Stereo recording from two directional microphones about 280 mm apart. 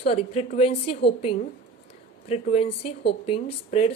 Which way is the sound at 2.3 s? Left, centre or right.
Left.